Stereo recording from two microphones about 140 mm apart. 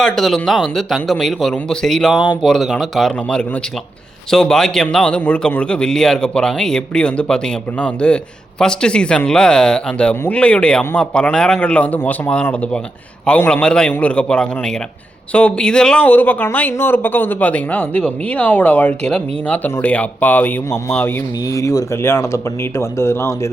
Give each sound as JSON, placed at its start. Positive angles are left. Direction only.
{"t": 0.0, "sound": "speech", "side_deg": 5}
{"t": 2.1, "sound": "speech", "side_deg": 30}
{"t": 2.4, "sound": "a man's voice", "side_deg": 0}
{"t": 21.5, "sound": "speech", "side_deg": 25}